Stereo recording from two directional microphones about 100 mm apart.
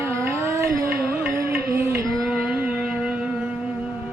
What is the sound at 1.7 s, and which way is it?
Music, 25° right (ahead or behind).